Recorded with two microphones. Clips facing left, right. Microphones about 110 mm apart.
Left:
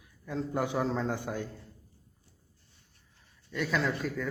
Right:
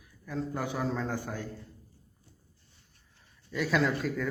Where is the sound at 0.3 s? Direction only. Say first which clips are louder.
Left 2 dB; 20° left (ahead or behind).